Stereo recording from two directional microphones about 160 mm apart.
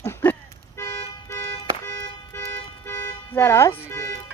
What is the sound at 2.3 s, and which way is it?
Toot, 15° left (ahead or behind).